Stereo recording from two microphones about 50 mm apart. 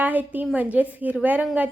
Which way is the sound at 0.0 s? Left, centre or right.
Right.